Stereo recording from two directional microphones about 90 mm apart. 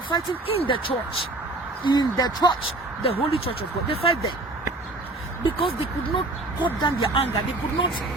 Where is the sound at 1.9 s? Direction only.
50° left (ahead or behind).